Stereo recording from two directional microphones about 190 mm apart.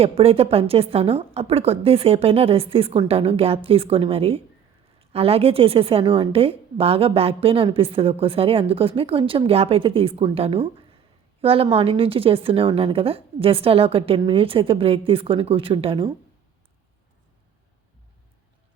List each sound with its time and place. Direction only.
0.0 s a woman's voice: 30° right (ahead or behind)